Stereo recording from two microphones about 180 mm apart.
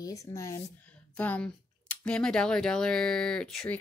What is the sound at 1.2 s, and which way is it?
Speech, 10° left (ahead or behind).